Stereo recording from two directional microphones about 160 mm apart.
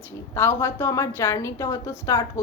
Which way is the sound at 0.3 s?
15° left (ahead or behind).